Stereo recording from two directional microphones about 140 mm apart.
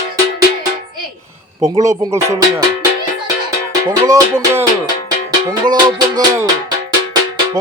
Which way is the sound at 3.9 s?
25° right (ahead or behind).